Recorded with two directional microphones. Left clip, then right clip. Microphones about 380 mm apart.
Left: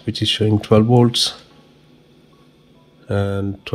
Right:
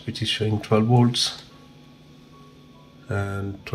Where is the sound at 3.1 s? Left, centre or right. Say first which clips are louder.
Left 8 dB; centre.